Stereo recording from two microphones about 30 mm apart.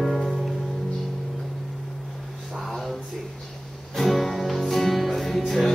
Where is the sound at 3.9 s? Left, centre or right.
Centre.